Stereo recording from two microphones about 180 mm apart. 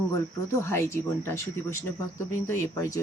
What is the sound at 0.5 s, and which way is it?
Speech, 15° left (ahead or behind).